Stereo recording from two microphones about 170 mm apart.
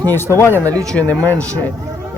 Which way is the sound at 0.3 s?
15° left (ahead or behind).